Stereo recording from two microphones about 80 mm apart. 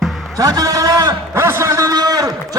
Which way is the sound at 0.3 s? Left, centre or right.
Right.